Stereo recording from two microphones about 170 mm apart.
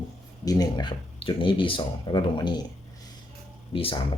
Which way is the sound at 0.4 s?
25° left (ahead or behind).